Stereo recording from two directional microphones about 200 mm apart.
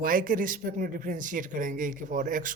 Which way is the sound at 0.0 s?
45° right (ahead or behind).